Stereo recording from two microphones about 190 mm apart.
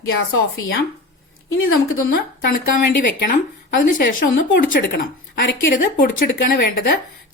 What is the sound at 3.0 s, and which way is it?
A woman's voice, 45° left (ahead or behind).